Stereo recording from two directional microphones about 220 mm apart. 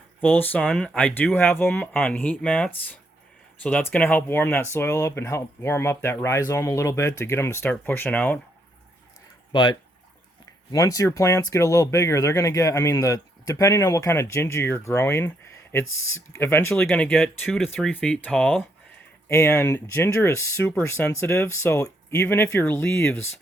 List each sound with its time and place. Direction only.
0.2 s speech: 10° left (ahead or behind)
9.5 s speech: 20° left (ahead or behind)